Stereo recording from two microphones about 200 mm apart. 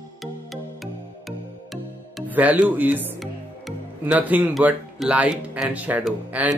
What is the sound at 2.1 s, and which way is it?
Speech, 10° right (ahead or behind).